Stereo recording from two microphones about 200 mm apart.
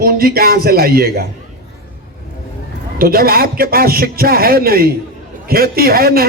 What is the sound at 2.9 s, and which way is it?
A man's voice, 50° right (ahead or behind).